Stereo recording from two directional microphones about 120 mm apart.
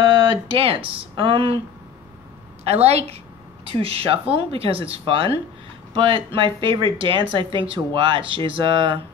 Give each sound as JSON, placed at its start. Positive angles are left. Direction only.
{"t": 0.0, "sound": "speech", "side_deg": -35}
{"t": 2.6, "sound": "a woman's voice", "side_deg": -60}